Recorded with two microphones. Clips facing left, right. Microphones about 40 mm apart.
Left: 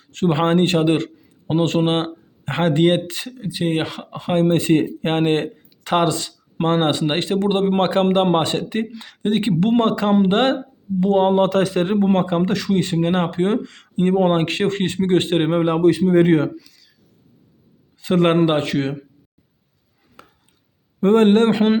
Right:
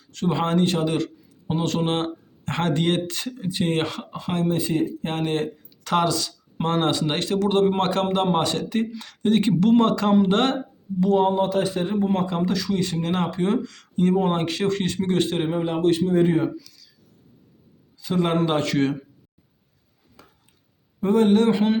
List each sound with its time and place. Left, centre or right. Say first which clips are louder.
0.0 s a man's voice: left 5 dB; left
3.2 s speech: left 2 dB; centre
4.2 s speech: left 8 dB; left
4.4 s speech: left 6 dB; left
4.9 s speech: left 6 dB; left
5.8 s speech: left 3 dB; left
9.6 s speech: left 1 dB; left
11.0 s speech: left 3 dB; left
11.3 s a man's voice: left 5 dB; left
12.2 s speech: left 4 dB; left
17.9 s a man's voice: left 6 dB; left
18.4 s speech: left 2 dB; left
20.2 s a sound: left 5 dB; left
21.0 s a man's voice: left 4 dB; left